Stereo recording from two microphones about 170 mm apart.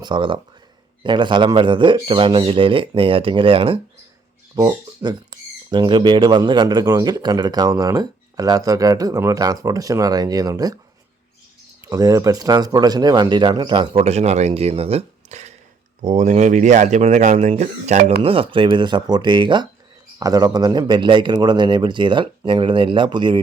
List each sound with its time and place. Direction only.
0.0 s speech: 30° right (ahead or behind)
11.8 s speech: 20° right (ahead or behind); by 18.1 s 45° right (ahead or behind)
18.2 s speech: 30° right (ahead or behind)